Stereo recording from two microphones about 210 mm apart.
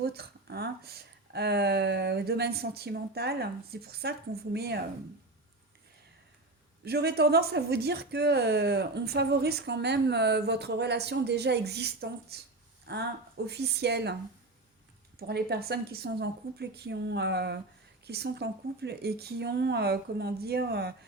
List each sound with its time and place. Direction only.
0.0 s a woman's voice: 50° right (ahead or behind)
6.8 s a woman's voice: 50° right (ahead or behind)
15.3 s a woman's voice: 50° right (ahead or behind)